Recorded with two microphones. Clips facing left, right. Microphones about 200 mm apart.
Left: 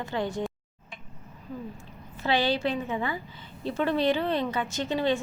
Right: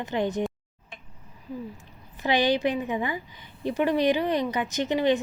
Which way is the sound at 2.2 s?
15° right (ahead or behind).